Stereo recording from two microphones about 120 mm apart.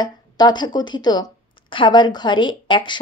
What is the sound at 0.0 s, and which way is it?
Speech, 35° left (ahead or behind).